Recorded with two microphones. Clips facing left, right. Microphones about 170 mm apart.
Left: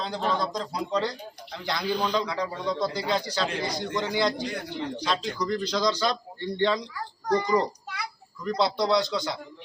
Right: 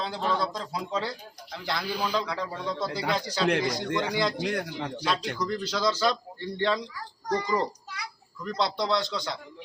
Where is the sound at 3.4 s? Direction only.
70° right (ahead or behind).